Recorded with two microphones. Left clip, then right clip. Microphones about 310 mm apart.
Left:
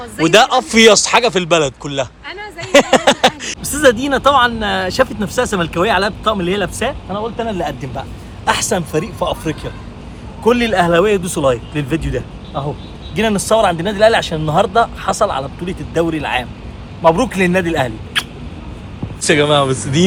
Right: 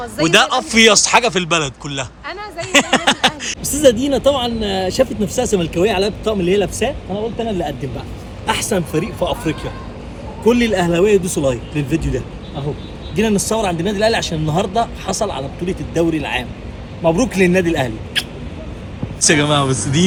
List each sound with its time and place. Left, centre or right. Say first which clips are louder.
0.2 s speech: left 3 dB; centre
7.1 s speech: left 1 dB; left
7.4 s speech: left 1 dB; left
8.4 s speech: left 3 dB; centre